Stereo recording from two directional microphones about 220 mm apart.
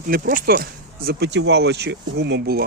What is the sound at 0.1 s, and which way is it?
Speech, 40° right (ahead or behind).